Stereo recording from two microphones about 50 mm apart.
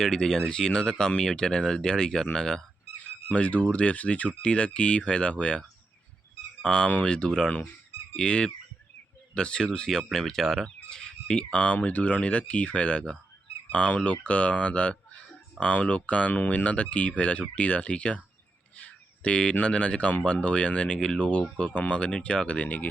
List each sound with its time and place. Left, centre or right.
0.0 s speech: centre
3.2 s speech: left
18.8 s a sound: left
19.6 s speech: left